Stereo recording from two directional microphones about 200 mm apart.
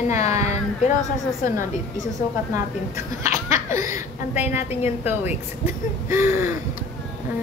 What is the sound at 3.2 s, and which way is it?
Laughter, 35° left (ahead or behind).